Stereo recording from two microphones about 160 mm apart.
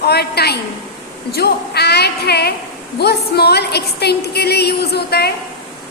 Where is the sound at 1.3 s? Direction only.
90° left.